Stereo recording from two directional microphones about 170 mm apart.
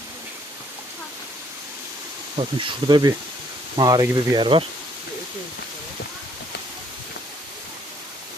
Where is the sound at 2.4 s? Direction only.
30° right (ahead or behind).